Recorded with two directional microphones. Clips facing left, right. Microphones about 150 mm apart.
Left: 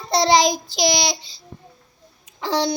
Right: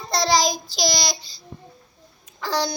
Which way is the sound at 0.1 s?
25° left (ahead or behind).